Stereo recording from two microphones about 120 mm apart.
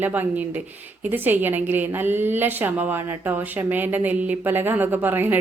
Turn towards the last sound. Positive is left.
turn(degrees=-15)  # may be behind; listen again after turning